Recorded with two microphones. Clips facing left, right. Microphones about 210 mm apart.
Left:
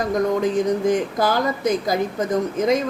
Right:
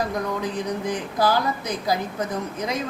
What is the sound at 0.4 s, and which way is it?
Speech, 45° left (ahead or behind).